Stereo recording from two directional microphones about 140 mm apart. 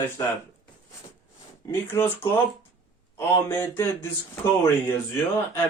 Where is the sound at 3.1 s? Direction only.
15° left (ahead or behind).